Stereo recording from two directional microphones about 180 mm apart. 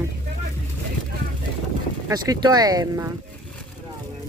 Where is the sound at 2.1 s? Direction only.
20° right (ahead or behind).